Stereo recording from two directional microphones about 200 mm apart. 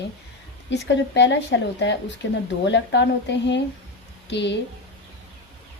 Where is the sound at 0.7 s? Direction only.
60° left (ahead or behind).